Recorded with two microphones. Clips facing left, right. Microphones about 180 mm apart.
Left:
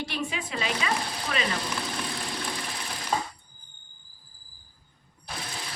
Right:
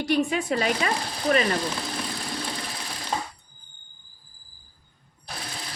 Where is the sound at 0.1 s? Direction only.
45° right (ahead or behind).